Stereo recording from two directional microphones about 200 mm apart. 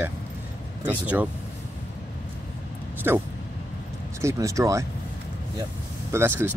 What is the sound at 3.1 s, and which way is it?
Speech, 10° right (ahead or behind).